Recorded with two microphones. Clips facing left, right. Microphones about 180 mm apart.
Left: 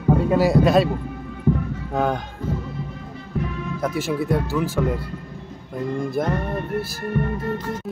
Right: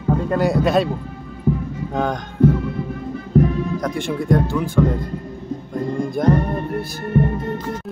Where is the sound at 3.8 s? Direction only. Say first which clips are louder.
Even; 5° left (ahead or behind).